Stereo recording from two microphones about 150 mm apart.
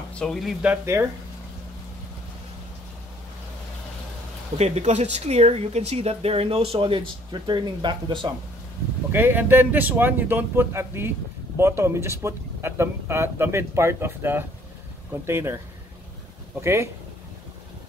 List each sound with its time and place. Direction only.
0.1 s speech: 5° left (ahead or behind)
4.6 s speech: 45° right (ahead or behind)
9.1 s speech: 15° right (ahead or behind)
16.6 s speech: 20° right (ahead or behind)